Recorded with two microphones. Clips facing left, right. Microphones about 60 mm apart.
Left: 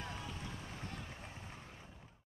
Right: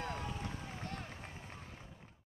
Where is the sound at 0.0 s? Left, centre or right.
Right.